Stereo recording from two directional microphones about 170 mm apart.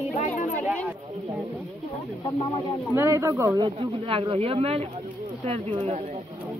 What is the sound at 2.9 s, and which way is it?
Speech, 15° right (ahead or behind).